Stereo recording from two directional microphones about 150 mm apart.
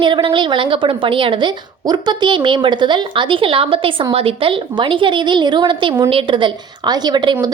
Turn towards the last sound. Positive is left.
turn(degrees=-30)  # may be behind; listen again after turning